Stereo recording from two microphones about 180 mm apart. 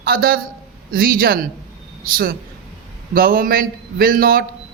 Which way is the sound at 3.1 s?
55° right (ahead or behind).